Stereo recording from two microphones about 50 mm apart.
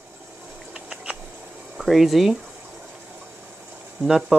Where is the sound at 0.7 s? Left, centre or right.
Right.